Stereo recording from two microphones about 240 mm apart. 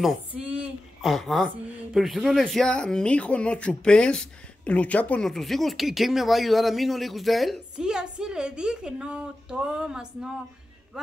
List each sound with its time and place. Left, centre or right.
0.0 s a woman's voice: centre